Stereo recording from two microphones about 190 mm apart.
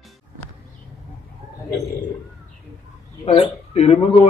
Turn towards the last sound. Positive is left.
turn(degrees=30)  # may be behind; listen again after turning